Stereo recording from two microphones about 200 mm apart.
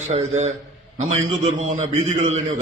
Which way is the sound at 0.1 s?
35° right (ahead or behind).